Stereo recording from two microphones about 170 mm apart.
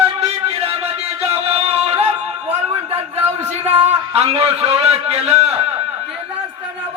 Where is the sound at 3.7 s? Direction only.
35° right (ahead or behind).